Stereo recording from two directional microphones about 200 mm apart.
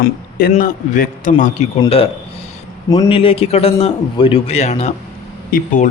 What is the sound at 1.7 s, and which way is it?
Speech, 30° left (ahead or behind).